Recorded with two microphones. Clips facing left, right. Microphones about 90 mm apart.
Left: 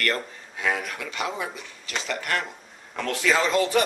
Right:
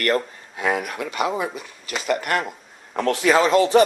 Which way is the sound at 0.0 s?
45° right (ahead or behind).